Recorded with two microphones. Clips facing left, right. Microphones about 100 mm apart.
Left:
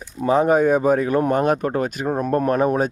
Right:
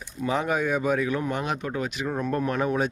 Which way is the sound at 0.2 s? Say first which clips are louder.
Left 9 dB; 40° left (ahead or behind).